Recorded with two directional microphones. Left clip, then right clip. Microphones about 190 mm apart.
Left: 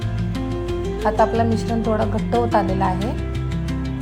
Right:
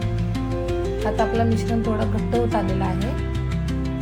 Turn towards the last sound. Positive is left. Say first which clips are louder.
# left 5 dB
turn(degrees=0)  # may be behind; listen again after turning